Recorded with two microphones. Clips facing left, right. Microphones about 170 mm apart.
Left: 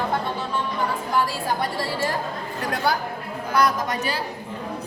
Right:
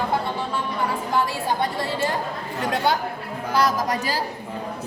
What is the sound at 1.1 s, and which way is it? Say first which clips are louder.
A woman's voice: even; 20° right (ahead or behind).